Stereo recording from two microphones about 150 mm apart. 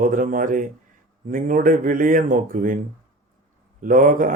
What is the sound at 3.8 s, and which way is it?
Speech, 65° right (ahead or behind).